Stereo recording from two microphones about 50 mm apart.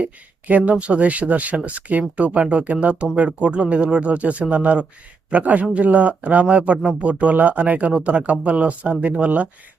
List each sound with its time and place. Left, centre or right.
0.0 s a man's voice: right